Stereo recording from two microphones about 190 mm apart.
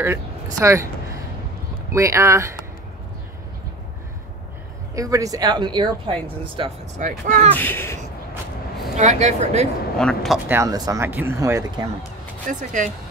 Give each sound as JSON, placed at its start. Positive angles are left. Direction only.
{"t": 0.0, "sound": "speech", "side_deg": -15}
{"t": 4.9, "sound": "speech", "side_deg": -20}
{"t": 7.0, "sound": "speech", "side_deg": -40}
{"t": 7.5, "sound": "speech", "side_deg": 10}
{"t": 8.9, "sound": "speech", "side_deg": -35}
{"t": 9.9, "sound": "speech", "side_deg": 0}
{"t": 10.5, "sound": "speech", "side_deg": -15}
{"t": 12.4, "sound": "speech", "side_deg": -40}